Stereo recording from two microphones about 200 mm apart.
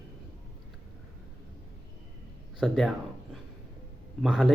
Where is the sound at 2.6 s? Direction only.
Centre (ahead or behind).